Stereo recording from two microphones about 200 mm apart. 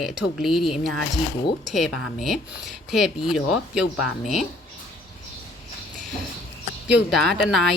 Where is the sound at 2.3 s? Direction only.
Centre (ahead or behind).